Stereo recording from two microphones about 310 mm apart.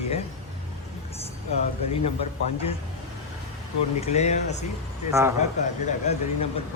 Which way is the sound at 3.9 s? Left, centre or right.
Left.